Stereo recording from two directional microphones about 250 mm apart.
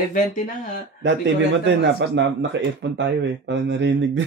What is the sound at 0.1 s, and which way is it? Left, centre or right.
Speech, left.